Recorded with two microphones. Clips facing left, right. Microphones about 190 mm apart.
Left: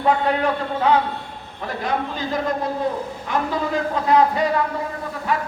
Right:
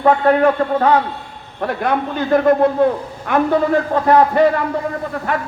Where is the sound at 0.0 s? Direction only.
50° right (ahead or behind).